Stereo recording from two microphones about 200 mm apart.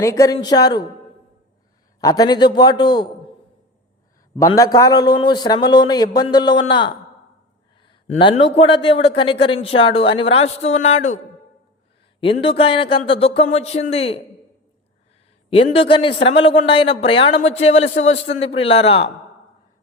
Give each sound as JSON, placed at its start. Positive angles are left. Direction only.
{"t": 0.0, "sound": "a man's voice", "side_deg": 15}
{"t": 2.0, "sound": "a man's voice", "side_deg": 20}
{"t": 4.4, "sound": "a man's voice", "side_deg": 15}
{"t": 12.2, "sound": "a man's voice", "side_deg": 25}
{"t": 15.4, "sound": "a man's voice", "side_deg": 25}